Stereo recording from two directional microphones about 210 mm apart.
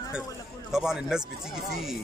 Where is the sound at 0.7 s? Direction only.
5° right (ahead or behind).